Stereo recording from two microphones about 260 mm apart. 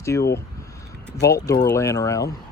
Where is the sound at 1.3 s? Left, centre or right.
Centre.